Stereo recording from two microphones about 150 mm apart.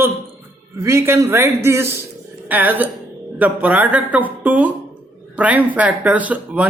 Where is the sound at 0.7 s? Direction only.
20° right (ahead or behind).